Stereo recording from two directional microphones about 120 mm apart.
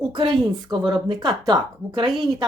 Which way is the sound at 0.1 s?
40° right (ahead or behind).